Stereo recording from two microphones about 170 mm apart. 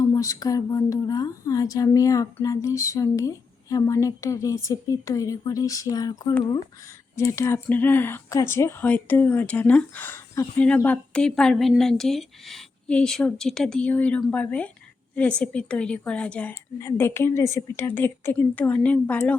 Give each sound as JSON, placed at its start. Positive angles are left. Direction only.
{"t": 0.0, "sound": "speech", "side_deg": 20}